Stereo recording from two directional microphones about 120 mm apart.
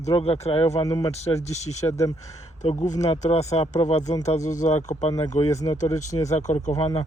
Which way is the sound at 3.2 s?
65° left (ahead or behind).